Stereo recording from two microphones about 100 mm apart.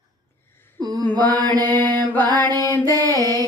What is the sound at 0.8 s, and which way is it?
Mantra, 45° right (ahead or behind).